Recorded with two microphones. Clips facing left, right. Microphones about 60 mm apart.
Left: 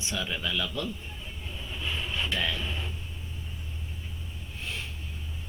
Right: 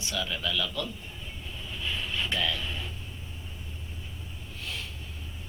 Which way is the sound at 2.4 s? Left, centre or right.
Left.